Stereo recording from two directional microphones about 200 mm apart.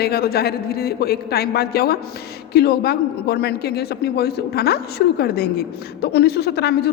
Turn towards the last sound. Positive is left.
turn(degrees=50)  # may be behind; listen again after turning